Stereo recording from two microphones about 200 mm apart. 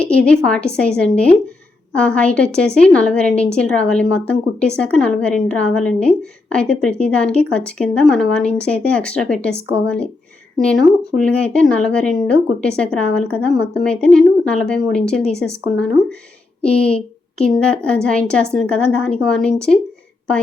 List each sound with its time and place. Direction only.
0.0 s a woman's voice: 5° left (ahead or behind)